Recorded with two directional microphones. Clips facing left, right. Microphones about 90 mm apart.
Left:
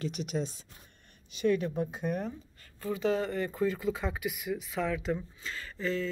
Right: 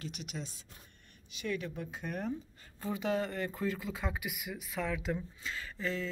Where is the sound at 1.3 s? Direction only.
40° left (ahead or behind).